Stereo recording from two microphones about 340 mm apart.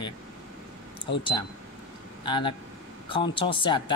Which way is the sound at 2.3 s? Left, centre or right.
Centre.